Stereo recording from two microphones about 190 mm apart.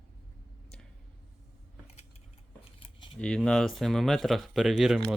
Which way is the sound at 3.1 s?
5° left (ahead or behind).